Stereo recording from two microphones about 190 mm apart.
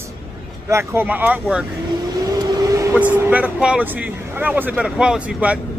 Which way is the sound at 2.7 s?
15° right (ahead or behind).